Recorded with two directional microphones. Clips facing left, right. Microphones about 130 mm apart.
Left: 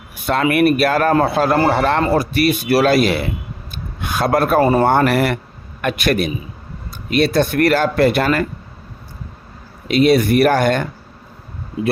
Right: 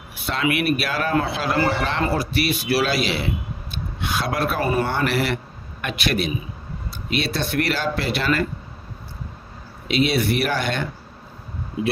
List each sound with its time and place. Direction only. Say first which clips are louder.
0.3 s a man's voice: left 7 dB; 50° left (ahead or behind)
9.9 s a man's voice: left 7 dB; 45° left (ahead or behind)